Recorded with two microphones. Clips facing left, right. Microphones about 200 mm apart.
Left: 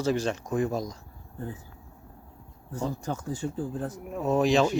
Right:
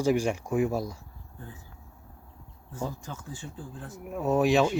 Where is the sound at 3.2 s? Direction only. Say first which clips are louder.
Left 10 dB; 40° left (ahead or behind).